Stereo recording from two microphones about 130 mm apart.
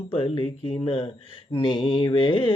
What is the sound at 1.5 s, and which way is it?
Mantra, 40° left (ahead or behind).